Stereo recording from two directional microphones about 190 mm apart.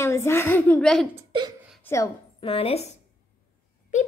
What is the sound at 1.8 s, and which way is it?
Speech, 15° left (ahead or behind).